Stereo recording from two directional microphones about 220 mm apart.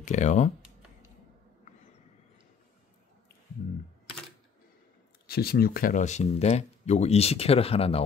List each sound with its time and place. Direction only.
0.0 s speech: 35° left (ahead or behind)
5.2 s speech: 45° left (ahead or behind); by 8.0 s 25° left (ahead or behind)